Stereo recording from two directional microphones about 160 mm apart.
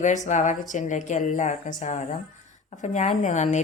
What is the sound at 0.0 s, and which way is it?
A woman's voice, 50° left (ahead or behind).